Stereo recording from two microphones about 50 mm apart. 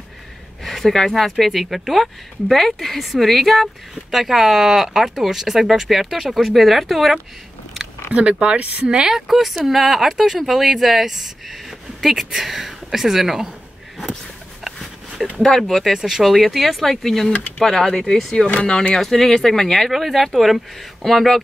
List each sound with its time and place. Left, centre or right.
0.7 s speech: centre
8.1 s speech: right
9.1 s speech: centre
15.4 s speech: centre
18.5 s speech: left
18.9 s speech: centre